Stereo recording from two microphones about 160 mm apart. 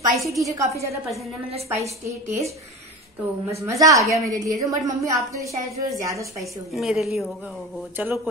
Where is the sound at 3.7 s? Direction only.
20° right (ahead or behind).